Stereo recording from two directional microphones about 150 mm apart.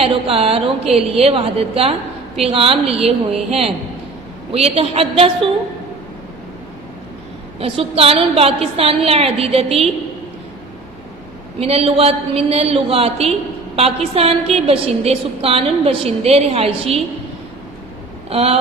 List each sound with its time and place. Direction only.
0.0 s a woman's voice: 40° right (ahead or behind)
4.5 s a woman's voice: 40° right (ahead or behind)
7.6 s a woman's voice: 40° right (ahead or behind)
11.6 s a woman's voice: 40° right (ahead or behind)
18.3 s vehicle: 40° right (ahead or behind)